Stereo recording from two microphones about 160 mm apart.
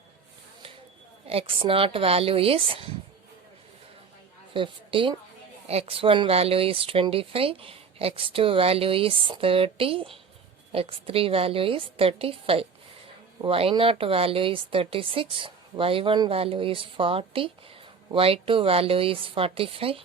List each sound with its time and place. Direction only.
1.3 s speech: 35° right (ahead or behind)
4.5 s speech: 35° right (ahead or behind)